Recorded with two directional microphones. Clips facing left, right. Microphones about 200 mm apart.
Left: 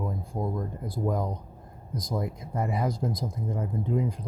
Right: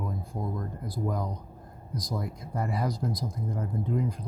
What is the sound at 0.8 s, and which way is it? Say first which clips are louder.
Speech: left 3 dB; 25° left (ahead or behind).